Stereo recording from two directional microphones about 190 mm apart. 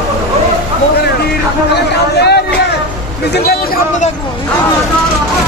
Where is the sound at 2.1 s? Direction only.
60° left (ahead or behind).